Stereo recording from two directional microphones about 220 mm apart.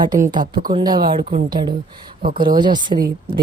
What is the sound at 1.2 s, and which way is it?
Speech, 35° right (ahead or behind).